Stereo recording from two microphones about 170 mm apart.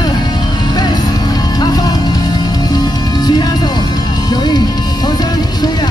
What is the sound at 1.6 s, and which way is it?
Music, 25° left (ahead or behind).